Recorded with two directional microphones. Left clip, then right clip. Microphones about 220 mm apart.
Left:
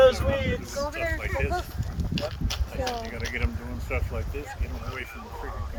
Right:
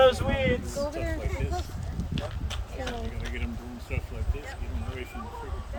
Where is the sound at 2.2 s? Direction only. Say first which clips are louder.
Left 6 dB; 45° left (ahead or behind).